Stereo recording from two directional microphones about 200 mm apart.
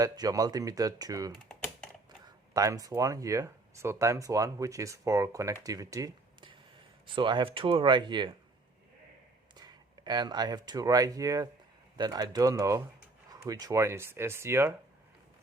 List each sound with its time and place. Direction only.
0.0 s speech: 20° right (ahead or behind)
1.5 s typing: 5° left (ahead or behind)
2.5 s speech: 15° right (ahead or behind)
9.6 s speech: 20° right (ahead or behind)